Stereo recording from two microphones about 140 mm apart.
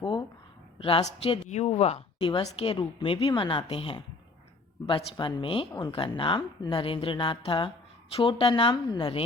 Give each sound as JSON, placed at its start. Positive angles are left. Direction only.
{"t": 0.8, "sound": "speech", "side_deg": 40}